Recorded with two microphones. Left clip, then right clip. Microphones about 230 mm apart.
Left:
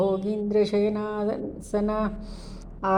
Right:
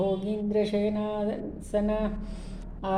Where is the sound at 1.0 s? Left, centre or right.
Left.